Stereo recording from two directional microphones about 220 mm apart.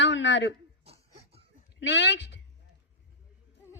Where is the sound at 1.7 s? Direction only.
55° left (ahead or behind).